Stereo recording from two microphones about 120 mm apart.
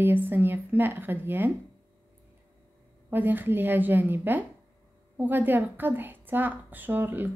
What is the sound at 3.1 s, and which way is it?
A woman's voice, 15° right (ahead or behind).